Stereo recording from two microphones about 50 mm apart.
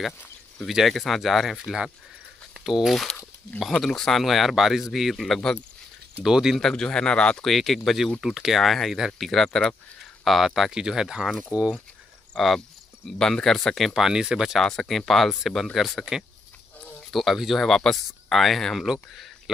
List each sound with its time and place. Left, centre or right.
0.7 s speech: centre
6.7 s a man's voice: centre
7.4 s speech: centre
10.7 s speech: centre
11.5 s speech: right
12.4 s speech: centre
14.6 s speech: centre
17.1 s speech: centre